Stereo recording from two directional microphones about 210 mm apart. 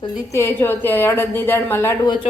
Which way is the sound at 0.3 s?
10° left (ahead or behind).